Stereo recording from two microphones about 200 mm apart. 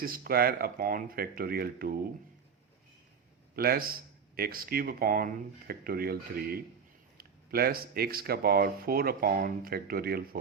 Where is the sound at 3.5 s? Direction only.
50° right (ahead or behind).